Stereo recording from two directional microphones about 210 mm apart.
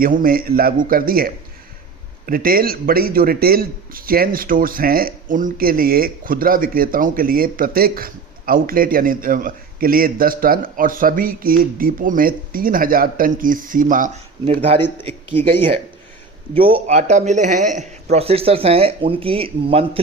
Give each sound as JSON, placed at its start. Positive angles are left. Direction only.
{"t": 0.0, "sound": "a man's voice", "side_deg": -45}
{"t": 15.0, "sound": "a man's voice", "side_deg": -25}